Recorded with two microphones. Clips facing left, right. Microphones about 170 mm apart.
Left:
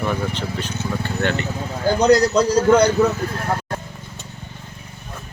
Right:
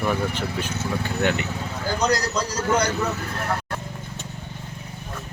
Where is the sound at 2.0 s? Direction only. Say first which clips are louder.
Left 9 dB; 60° left (ahead or behind).